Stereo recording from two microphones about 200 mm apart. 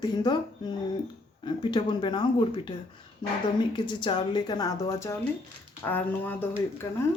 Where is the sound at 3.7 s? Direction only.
25° left (ahead or behind).